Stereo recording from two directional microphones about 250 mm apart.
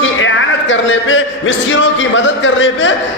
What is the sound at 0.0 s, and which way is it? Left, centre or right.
Speech, left.